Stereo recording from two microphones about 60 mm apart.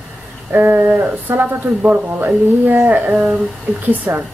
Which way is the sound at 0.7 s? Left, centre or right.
Right.